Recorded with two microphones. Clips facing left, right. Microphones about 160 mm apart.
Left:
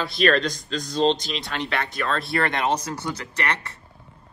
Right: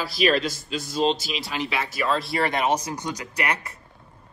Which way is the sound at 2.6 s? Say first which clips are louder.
Even; 10° right (ahead or behind).